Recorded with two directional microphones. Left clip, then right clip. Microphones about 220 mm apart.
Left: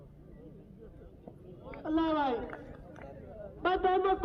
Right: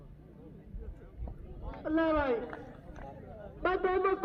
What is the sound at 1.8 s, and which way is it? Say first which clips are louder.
Speech: right 1 dB; 50° left (ahead or behind).